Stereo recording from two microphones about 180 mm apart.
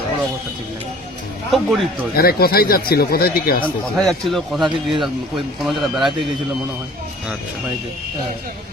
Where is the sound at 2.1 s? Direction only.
55° left (ahead or behind).